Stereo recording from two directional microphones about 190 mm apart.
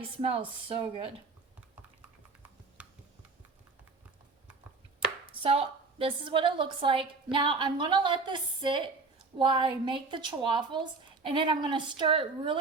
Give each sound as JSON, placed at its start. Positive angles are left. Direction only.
{"t": 0.2, "sound": "a woman's voice", "side_deg": -30}
{"t": 2.8, "sound": "a sound", "side_deg": -5}
{"t": 4.9, "sound": "a woman's voice", "side_deg": -30}